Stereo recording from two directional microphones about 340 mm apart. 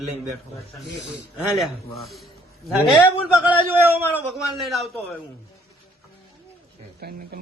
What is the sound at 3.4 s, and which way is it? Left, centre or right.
A man's voice, centre.